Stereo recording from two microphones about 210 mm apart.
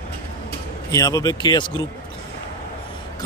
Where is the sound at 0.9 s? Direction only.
15° left (ahead or behind).